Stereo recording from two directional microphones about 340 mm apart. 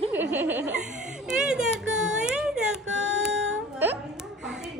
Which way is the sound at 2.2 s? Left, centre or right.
Centre.